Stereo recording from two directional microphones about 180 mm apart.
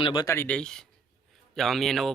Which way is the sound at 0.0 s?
25° left (ahead or behind).